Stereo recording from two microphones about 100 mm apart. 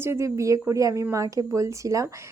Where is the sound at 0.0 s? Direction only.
30° right (ahead or behind).